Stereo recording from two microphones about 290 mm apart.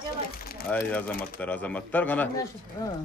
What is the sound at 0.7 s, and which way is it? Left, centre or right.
Speech, centre.